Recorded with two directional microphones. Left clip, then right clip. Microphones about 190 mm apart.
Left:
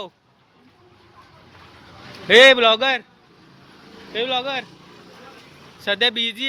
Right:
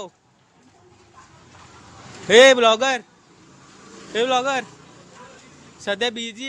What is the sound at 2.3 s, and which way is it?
Speech, 15° right (ahead or behind).